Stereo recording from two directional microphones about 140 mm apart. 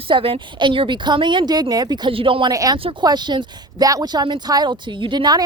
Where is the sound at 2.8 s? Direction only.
40° right (ahead or behind).